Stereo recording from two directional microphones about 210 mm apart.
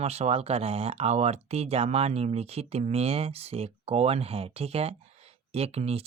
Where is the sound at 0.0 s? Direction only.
30° right (ahead or behind).